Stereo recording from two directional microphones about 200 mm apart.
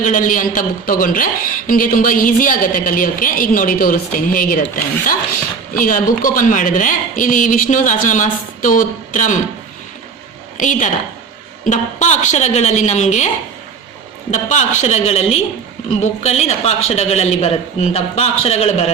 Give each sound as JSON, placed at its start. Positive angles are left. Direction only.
{"t": 0.0, "sound": "a woman's voice", "side_deg": 40}
{"t": 5.7, "sound": "a woman's voice", "side_deg": 45}
{"t": 10.6, "sound": "a woman's voice", "side_deg": 40}